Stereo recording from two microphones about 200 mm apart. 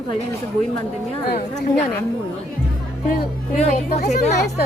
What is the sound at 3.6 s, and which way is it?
Speech, 35° left (ahead or behind).